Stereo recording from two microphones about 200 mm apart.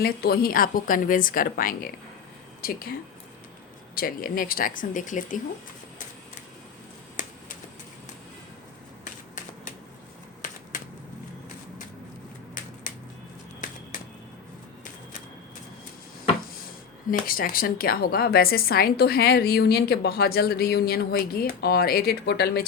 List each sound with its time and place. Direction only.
0.0 s a woman's voice: 50° left (ahead or behind)
3.9 s a woman's voice: 45° left (ahead or behind)
12.9 s a sound: 40° left (ahead or behind)
17.1 s a woman's voice: 45° left (ahead or behind)